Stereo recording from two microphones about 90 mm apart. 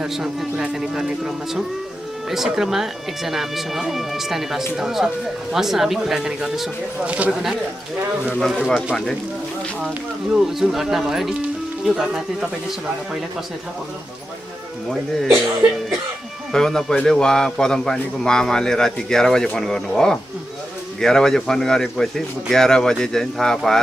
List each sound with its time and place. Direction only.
0.0 s a man's voice: 5° right (ahead or behind)
7.1 s speech: 15° right (ahead or behind)
8.4 s a man's voice: 5° left (ahead or behind)
10.3 s a man's voice: 5° right (ahead or behind)
16.5 s a man's voice: 5° left (ahead or behind)